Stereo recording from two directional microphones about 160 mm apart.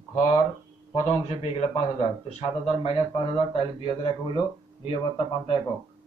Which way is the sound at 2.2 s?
40° left (ahead or behind).